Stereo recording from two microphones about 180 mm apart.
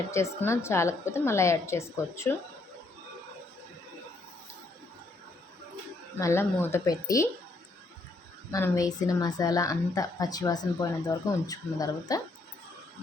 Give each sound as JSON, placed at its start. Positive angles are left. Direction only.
{"t": 0.1, "sound": "a woman's voice", "side_deg": 15}
{"t": 6.1, "sound": "a woman's voice", "side_deg": 15}
{"t": 8.5, "sound": "a woman's voice", "side_deg": 20}